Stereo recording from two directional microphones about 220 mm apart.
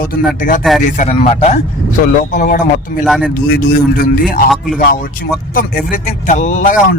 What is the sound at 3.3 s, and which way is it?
Speech, 45° left (ahead or behind).